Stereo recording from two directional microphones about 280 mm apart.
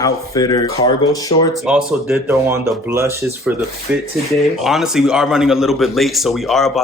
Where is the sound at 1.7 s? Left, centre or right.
Centre.